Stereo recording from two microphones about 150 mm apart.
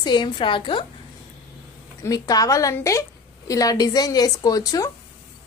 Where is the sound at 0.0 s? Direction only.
30° left (ahead or behind).